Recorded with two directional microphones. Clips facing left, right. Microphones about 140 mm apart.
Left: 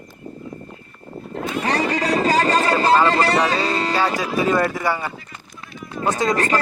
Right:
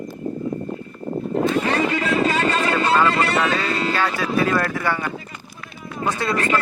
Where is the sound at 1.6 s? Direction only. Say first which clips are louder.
Even; 35° left (ahead or behind).